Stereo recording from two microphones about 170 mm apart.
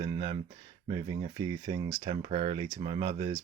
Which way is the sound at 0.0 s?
35° right (ahead or behind).